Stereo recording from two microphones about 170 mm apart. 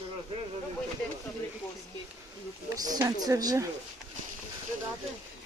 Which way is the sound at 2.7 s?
20° right (ahead or behind).